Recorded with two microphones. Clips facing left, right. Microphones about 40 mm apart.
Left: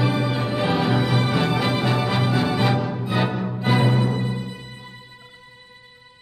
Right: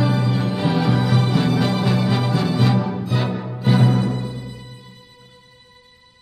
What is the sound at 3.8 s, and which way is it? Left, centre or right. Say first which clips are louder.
Music: right 1 dB; left.